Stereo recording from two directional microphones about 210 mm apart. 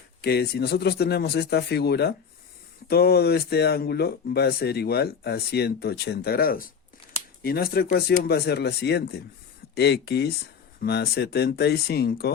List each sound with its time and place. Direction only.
0.2 s speech: 50° left (ahead or behind)